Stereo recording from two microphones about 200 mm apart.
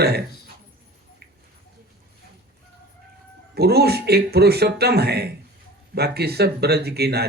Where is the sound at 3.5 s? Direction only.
50° right (ahead or behind).